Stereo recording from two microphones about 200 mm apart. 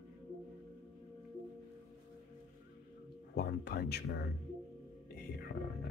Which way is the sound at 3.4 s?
55° left (ahead or behind).